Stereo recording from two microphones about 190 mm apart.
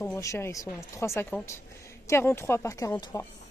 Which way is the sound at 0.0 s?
15° left (ahead or behind).